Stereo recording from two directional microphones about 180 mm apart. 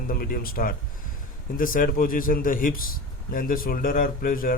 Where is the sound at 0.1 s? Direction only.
55° left (ahead or behind).